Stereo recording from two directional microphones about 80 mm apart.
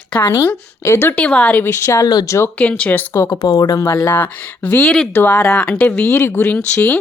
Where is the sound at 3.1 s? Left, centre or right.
Left.